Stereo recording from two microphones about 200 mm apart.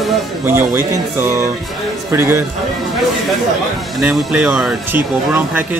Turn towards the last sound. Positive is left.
turn(degrees=-10)  # may be behind; listen again after turning